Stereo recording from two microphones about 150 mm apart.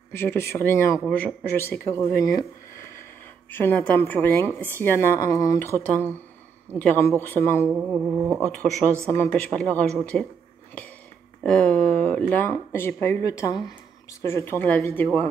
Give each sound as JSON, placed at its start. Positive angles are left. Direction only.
{"t": 0.1, "sound": "speech", "side_deg": 15}
{"t": 6.8, "sound": "speech", "side_deg": 15}
{"t": 7.7, "sound": "a sound", "side_deg": -10}
{"t": 8.4, "sound": "speech", "side_deg": 5}
{"t": 11.4, "sound": "speech", "side_deg": 5}